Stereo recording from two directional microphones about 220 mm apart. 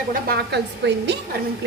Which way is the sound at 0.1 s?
45° right (ahead or behind).